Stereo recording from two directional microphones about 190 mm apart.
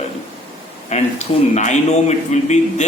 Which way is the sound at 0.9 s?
35° left (ahead or behind).